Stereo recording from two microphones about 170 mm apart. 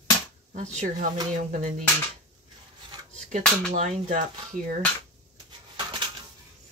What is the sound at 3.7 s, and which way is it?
Speech, 45° right (ahead or behind).